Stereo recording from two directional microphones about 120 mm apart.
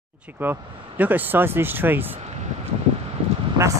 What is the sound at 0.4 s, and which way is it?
Speech, 15° right (ahead or behind).